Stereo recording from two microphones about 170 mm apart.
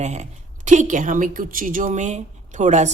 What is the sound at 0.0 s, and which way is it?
Speech, 40° right (ahead or behind).